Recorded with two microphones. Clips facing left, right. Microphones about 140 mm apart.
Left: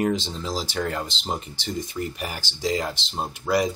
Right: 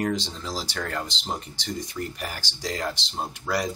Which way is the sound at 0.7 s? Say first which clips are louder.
Left 4 dB; 10° left (ahead or behind).